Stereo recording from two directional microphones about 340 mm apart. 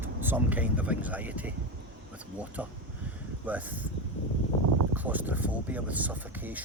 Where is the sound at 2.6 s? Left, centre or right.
Centre.